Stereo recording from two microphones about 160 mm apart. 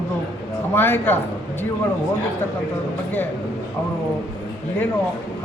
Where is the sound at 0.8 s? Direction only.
15° left (ahead or behind).